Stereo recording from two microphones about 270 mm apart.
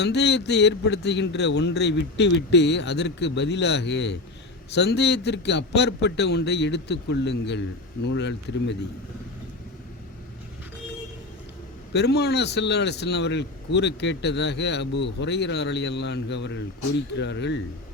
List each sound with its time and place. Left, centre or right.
0.0 s a man's voice: left
11.9 s a man's voice: left